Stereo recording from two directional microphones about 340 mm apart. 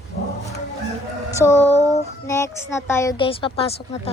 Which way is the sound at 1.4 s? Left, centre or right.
Centre.